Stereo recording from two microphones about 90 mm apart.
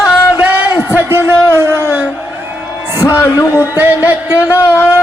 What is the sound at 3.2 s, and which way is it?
Speech, 25° left (ahead or behind).